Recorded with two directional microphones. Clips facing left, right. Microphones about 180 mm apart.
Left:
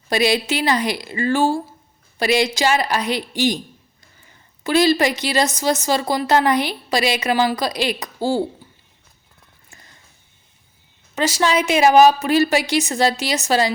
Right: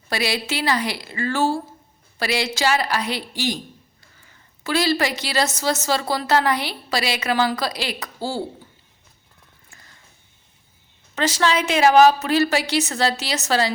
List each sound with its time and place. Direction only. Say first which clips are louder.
0.1 s a woman's voice: left 6 dB; 20° left (ahead or behind)
4.6 s a woman's voice: left 5 dB; 20° left (ahead or behind)
11.1 s a woman's voice: left 2 dB; 10° left (ahead or behind)